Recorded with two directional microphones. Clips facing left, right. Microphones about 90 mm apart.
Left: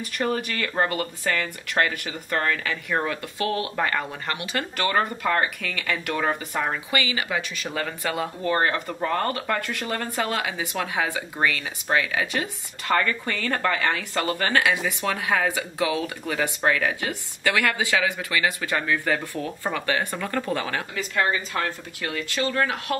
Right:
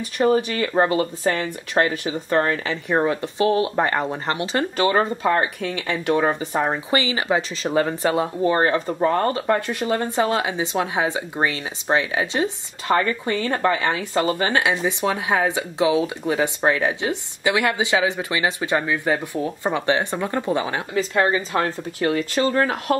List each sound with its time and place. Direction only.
0.2 s speech: 20° right (ahead or behind)